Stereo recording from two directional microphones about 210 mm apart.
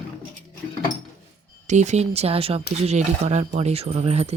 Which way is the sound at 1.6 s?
35° right (ahead or behind).